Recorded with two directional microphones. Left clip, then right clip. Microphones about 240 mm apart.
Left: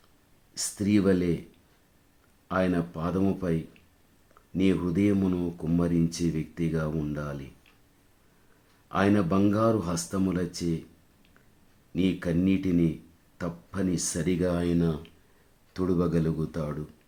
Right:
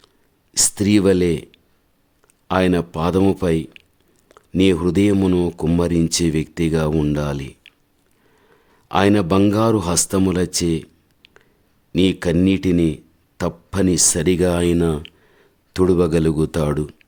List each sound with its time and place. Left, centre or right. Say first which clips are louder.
0.5 s speech: right 10 dB; right
2.5 s speech: right 9 dB; right
8.9 s speech: right 9 dB; right
11.9 s speech: right 11 dB; right